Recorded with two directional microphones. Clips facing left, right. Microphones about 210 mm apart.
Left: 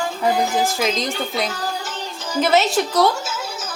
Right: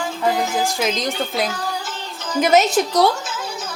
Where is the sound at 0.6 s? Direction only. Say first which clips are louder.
Even; centre (ahead or behind).